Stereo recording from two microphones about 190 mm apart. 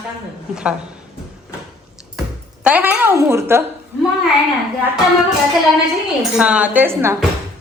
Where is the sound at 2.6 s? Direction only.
10° right (ahead or behind).